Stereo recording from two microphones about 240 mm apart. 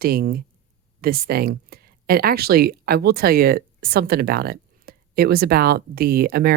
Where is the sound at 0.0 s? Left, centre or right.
Right.